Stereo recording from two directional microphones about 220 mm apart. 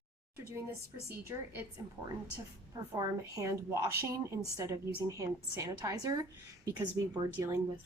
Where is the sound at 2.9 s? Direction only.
15° right (ahead or behind).